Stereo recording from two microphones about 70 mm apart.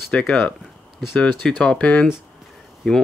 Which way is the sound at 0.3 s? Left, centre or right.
Centre.